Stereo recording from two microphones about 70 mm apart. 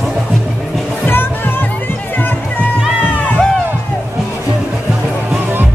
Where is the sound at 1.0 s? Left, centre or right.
Left.